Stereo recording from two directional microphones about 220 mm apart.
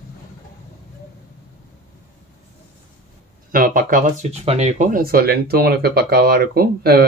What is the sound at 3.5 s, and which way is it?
Speech, 40° right (ahead or behind).